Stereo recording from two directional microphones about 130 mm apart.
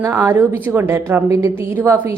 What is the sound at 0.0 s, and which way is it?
A woman's voice, 20° right (ahead or behind).